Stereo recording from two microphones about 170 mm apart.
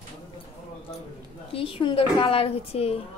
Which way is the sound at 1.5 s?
30° left (ahead or behind).